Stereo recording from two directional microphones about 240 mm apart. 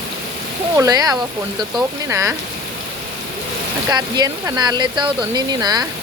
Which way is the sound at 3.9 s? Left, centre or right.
Centre.